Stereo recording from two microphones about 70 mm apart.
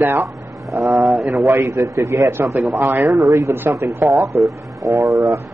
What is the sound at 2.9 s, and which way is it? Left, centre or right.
A man's voice, right.